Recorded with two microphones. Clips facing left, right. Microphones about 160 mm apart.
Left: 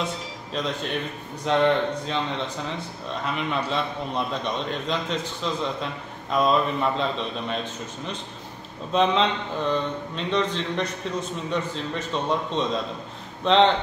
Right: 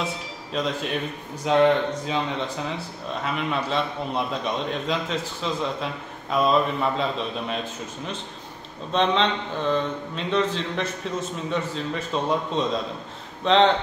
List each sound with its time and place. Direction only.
0.0 s a man's voice: centre (ahead or behind)
8.9 s speech: centre (ahead or behind)